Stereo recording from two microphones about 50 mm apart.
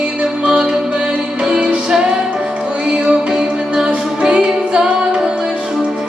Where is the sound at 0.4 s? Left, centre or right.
Centre.